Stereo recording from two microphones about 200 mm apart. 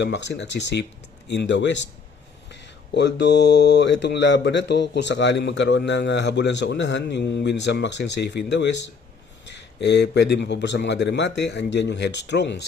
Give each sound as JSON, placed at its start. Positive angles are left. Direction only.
{"t": 0.0, "sound": "speech", "side_deg": 60}
{"t": 2.9, "sound": "speech", "side_deg": 60}
{"t": 9.8, "sound": "speech", "side_deg": 60}